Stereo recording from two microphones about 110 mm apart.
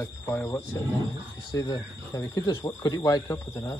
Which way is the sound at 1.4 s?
40° left (ahead or behind).